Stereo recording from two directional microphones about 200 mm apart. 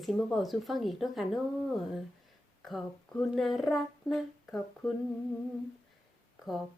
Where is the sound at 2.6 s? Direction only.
Centre (ahead or behind).